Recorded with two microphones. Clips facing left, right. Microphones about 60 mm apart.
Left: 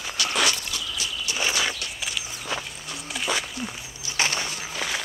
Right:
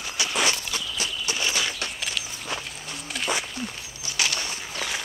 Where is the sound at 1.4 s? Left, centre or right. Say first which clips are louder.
Left 3 dB; left.